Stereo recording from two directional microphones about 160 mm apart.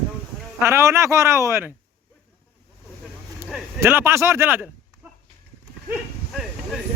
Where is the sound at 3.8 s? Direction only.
15° right (ahead or behind).